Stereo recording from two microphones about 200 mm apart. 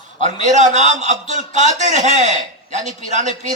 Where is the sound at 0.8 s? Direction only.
35° right (ahead or behind).